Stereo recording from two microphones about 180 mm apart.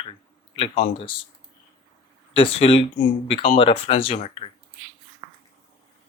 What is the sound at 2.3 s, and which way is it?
Speech, 30° left (ahead or behind).